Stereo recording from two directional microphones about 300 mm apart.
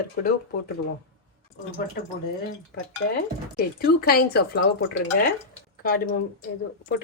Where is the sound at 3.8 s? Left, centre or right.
Left.